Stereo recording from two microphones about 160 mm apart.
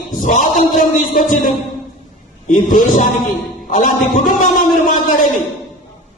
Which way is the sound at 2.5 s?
55° left (ahead or behind).